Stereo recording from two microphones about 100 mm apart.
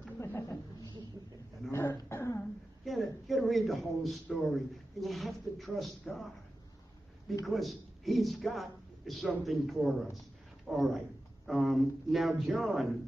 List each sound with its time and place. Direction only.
0.2 s a sound: 25° left (ahead or behind)
1.7 s cough: 25° left (ahead or behind)
2.8 s a man's voice: centre (ahead or behind)
7.4 s a man's voice: centre (ahead or behind)